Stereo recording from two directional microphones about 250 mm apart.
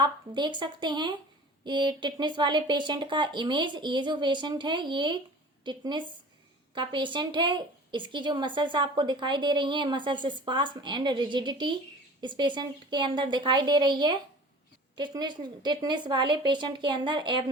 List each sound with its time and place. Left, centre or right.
0.0 s a woman's voice: centre